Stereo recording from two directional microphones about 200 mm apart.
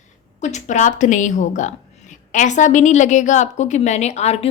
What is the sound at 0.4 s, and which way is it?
A woman's voice, 35° left (ahead or behind).